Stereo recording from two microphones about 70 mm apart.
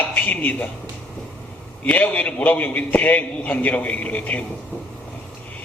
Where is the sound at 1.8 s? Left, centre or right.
Left.